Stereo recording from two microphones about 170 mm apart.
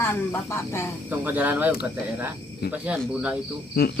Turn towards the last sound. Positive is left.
turn(degrees=65)  # may be behind; listen again after turning